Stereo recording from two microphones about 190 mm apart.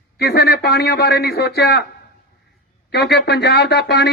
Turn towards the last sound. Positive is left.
turn(degrees=60)  # may be behind; listen again after turning